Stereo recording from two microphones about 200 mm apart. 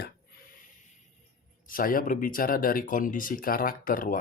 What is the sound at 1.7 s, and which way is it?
Speech, 45° left (ahead or behind).